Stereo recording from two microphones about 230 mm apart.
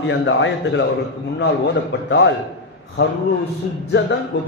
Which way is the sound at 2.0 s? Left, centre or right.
Left.